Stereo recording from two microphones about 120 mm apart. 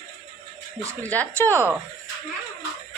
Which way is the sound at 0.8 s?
25° right (ahead or behind).